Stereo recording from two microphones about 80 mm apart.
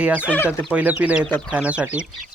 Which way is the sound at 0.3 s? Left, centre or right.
Left.